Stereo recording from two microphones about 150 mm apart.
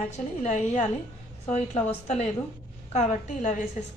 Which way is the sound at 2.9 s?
50° left (ahead or behind).